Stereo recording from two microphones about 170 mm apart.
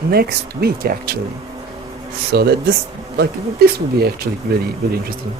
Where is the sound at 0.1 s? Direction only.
65° right (ahead or behind).